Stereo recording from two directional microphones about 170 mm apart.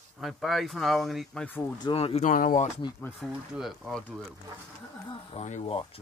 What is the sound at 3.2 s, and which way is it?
Speech, centre (ahead or behind).